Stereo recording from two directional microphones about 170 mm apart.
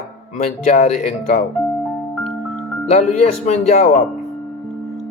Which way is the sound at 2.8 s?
45° left (ahead or behind).